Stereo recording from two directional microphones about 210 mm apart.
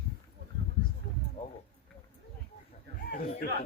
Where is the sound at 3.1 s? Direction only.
40° left (ahead or behind).